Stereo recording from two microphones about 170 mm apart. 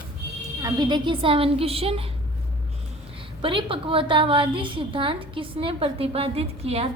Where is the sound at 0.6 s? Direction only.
25° right (ahead or behind).